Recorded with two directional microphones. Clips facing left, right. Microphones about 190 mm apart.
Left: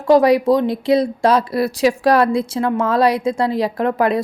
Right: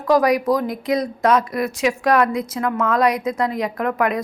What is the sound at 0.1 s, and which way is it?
Speech, 30° left (ahead or behind).